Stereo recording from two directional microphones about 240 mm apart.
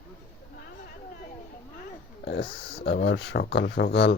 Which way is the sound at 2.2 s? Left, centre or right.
Left.